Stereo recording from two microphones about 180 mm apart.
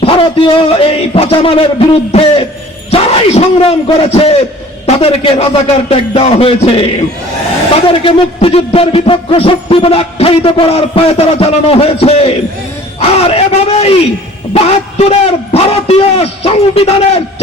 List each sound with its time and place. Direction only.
0.0 s speech: 30° left (ahead or behind)